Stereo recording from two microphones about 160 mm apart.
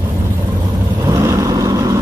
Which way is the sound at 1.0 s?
20° right (ahead or behind).